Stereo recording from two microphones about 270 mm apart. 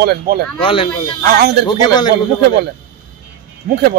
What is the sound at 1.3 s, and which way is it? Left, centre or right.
Speech, right.